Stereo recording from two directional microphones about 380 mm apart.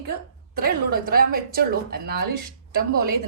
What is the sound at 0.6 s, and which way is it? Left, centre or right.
Speech, right.